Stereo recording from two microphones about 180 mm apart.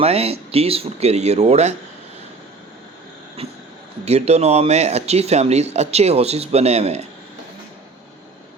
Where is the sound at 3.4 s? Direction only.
35° right (ahead or behind).